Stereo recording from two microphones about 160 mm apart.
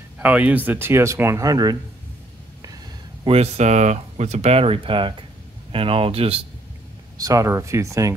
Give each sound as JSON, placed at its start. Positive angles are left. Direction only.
{"t": 0.2, "sound": "speech", "side_deg": -10}
{"t": 3.3, "sound": "speech", "side_deg": -40}
{"t": 7.2, "sound": "speech", "side_deg": -20}